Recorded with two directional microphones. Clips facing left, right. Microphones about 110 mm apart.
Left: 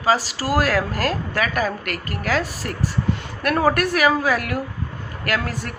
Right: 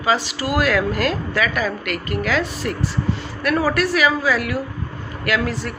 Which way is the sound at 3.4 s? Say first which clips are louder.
Even; 55° left (ahead or behind).